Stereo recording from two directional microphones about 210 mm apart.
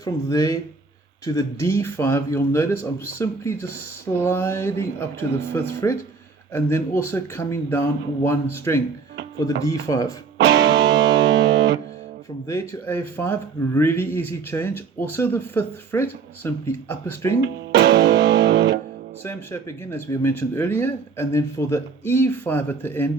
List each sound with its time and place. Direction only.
0.0 s speech: 15° left (ahead or behind)
10.3 s music: 55° right (ahead or behind)
12.5 s speech: 15° left (ahead or behind)
17.7 s music: 55° right (ahead or behind)
19.2 s speech: 10° left (ahead or behind)